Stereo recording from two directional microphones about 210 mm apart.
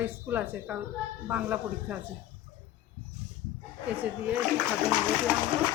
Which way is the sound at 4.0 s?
5° right (ahead or behind).